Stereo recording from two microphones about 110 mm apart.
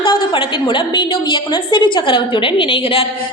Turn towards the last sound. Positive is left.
turn(degrees=55)  # may be behind; listen again after turning